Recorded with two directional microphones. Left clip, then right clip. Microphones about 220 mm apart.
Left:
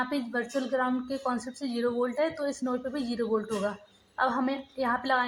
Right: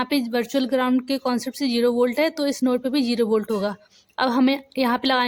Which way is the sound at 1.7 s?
70° right (ahead or behind).